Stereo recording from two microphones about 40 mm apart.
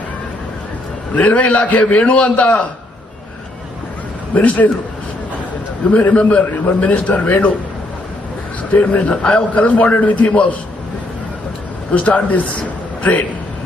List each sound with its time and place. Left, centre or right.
1.1 s a man's voice: left
4.4 s a man's voice: left
6.1 s a man's voice: left
8.7 s a man's voice: left
11.9 s a man's voice: left